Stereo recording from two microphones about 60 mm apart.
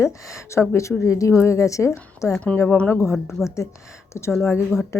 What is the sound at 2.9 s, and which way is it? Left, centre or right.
Speech, left.